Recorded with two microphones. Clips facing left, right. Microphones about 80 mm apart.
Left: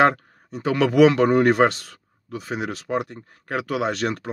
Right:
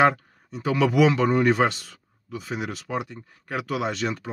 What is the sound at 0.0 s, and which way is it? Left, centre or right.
Speech, left.